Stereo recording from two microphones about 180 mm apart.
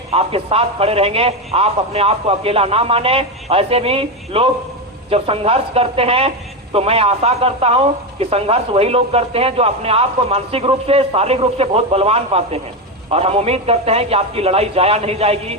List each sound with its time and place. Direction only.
0.1 s speech: 30° right (ahead or behind)